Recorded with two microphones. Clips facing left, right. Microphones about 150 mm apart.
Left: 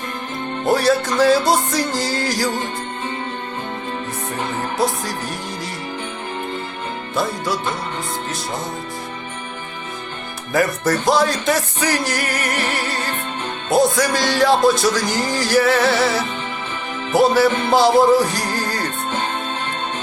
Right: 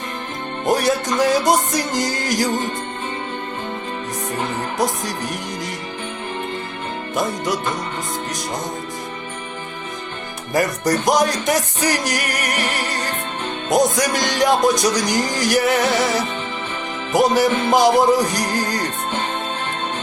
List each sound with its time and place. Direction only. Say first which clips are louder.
0.7 s music: left 1 dB; 20° right (ahead or behind)
4.8 s music: left 1 dB; 15° right (ahead or behind)
7.2 s music: even; 20° right (ahead or behind)
10.8 s music: right 1 dB; 15° right (ahead or behind)
13.7 s music: left 1 dB; 15° right (ahead or behind)